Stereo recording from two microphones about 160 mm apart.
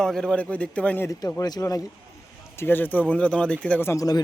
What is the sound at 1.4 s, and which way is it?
Speech, 25° left (ahead or behind).